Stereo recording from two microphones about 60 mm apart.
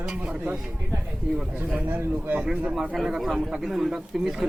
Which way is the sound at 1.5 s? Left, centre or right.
Right.